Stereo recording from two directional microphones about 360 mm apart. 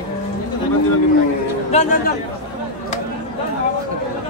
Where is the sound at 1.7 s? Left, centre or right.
Centre.